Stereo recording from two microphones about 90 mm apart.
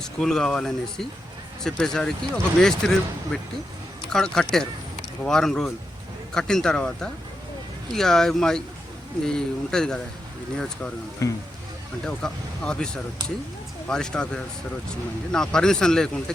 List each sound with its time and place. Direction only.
0.0 s speech: 5° left (ahead or behind)
4.1 s speech: 5° left (ahead or behind)
11.2 s speech: 40° left (ahead or behind)
12.0 s speech: 10° left (ahead or behind)